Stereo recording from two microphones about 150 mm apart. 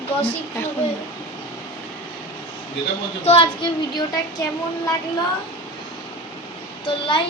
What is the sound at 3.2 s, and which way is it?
Speech, 35° left (ahead or behind).